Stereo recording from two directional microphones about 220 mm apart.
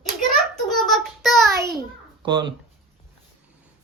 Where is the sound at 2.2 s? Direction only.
20° right (ahead or behind).